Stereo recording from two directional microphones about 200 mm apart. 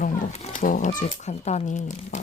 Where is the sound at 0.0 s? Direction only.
35° left (ahead or behind).